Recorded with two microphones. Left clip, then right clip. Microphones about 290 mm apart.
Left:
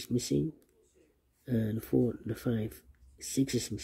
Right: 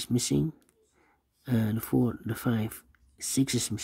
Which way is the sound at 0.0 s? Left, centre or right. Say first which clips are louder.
Right 3 dB; right.